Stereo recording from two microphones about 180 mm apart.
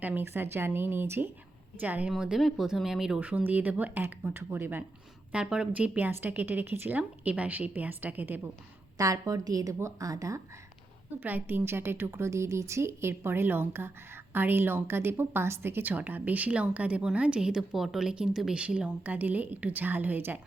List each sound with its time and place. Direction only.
0.0 s a woman's voice: 10° right (ahead or behind)